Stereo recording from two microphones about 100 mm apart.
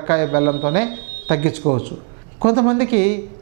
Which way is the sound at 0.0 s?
15° right (ahead or behind).